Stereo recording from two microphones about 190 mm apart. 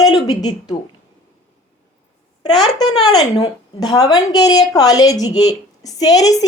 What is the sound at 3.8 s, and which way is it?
A woman's voice, 20° left (ahead or behind).